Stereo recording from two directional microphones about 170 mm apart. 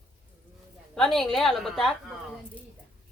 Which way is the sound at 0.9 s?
5° left (ahead or behind).